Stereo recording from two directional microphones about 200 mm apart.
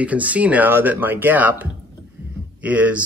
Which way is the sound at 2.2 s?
10° right (ahead or behind).